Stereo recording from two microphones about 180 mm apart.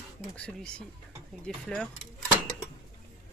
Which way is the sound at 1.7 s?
5° left (ahead or behind).